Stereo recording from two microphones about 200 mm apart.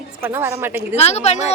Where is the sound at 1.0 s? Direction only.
30° left (ahead or behind).